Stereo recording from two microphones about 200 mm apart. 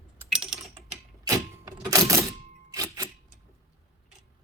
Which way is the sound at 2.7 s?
20° right (ahead or behind).